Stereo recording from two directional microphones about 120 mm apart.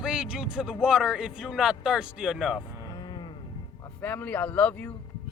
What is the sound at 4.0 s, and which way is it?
Speech, 15° left (ahead or behind).